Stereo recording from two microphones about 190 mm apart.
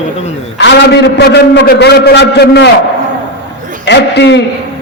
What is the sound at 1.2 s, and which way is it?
A man's voice, 60° left (ahead or behind).